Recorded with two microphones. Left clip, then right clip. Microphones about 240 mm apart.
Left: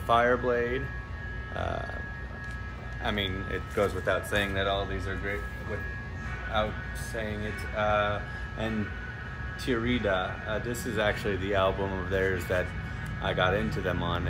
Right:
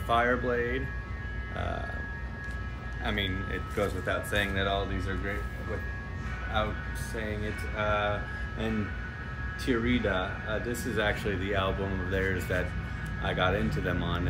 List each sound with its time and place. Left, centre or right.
0.1 s speech: centre
3.0 s speech: centre
6.5 s speech: centre
9.7 s speech: centre